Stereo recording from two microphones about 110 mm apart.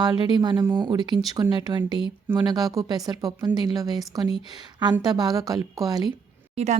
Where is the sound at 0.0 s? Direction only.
40° right (ahead or behind).